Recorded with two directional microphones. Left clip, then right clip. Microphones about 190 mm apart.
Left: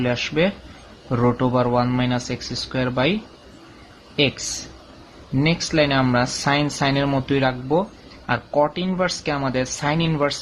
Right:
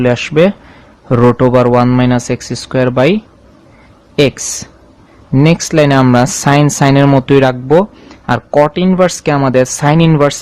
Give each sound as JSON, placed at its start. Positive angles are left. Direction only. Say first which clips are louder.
{"t": 0.0, "sound": "a man's voice", "louder": "right 11 dB", "side_deg": -50}
{"t": 5.4, "sound": "a man's voice", "louder": "right 9 dB", "side_deg": -50}